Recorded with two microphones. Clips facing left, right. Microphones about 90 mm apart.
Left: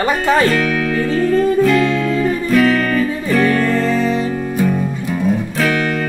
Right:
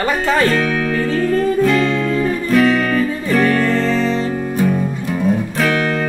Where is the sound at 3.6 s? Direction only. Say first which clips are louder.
Left 1 dB; 10° left (ahead or behind).